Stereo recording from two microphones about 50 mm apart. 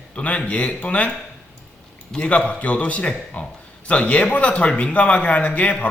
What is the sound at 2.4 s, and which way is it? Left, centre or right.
A man's voice, left.